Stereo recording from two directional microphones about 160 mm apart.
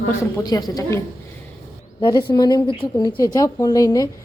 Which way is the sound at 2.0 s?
30° left (ahead or behind).